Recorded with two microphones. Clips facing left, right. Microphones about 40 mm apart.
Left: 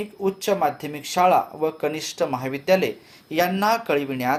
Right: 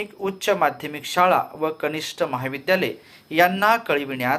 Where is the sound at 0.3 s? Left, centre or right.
Right.